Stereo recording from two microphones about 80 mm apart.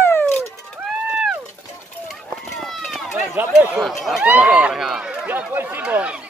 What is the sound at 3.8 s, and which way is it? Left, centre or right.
Speech, centre.